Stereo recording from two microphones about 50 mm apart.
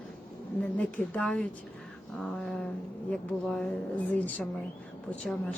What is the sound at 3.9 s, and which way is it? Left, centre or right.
Speech, left.